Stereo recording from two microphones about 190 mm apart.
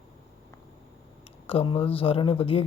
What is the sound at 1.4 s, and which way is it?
Speech, 30° left (ahead or behind).